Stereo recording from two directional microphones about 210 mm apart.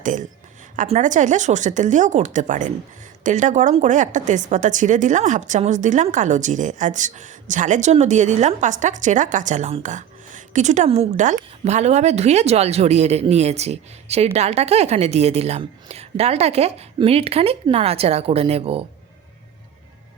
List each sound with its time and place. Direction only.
0.0 s a woman's voice: 35° right (ahead or behind)